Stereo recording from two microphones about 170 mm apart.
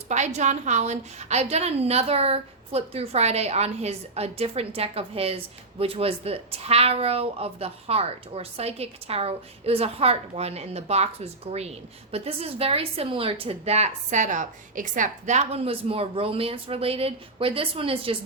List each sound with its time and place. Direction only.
0.1 s speech: 40° right (ahead or behind)